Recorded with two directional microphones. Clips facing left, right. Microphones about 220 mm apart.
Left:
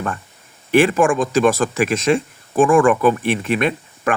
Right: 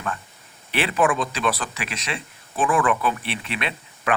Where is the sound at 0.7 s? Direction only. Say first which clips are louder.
Left 8 dB; 45° left (ahead or behind).